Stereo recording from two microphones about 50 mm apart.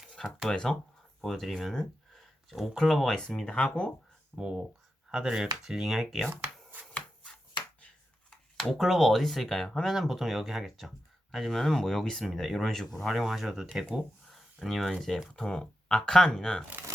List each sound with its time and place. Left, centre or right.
0.2 s speech: centre
1.2 s speech: centre
1.8 s a sound: centre
2.8 s speech: centre
3.4 s speech: left
4.4 s speech: centre
8.8 s speech: centre